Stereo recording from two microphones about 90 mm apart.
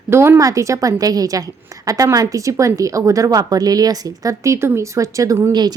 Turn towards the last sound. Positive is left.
turn(degrees=-50)  # may be behind; listen again after turning